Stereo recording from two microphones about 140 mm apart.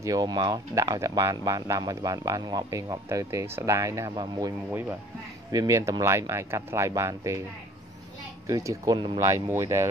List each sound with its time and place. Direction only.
0.0 s speech: 25° right (ahead or behind)
4.6 s speech: 15° right (ahead or behind)
8.5 s speech: 25° right (ahead or behind)